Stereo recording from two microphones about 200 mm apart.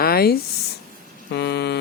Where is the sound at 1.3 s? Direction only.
55° left (ahead or behind).